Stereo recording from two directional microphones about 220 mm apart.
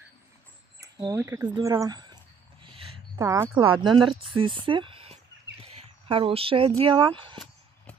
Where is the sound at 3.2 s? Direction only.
15° right (ahead or behind).